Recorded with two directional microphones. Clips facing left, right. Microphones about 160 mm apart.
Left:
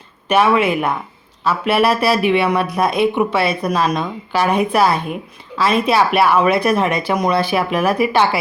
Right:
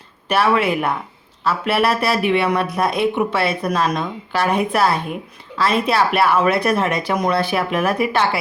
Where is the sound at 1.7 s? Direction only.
25° left (ahead or behind).